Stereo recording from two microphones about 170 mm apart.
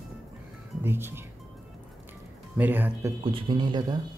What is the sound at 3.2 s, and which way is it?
Speech, 30° right (ahead or behind).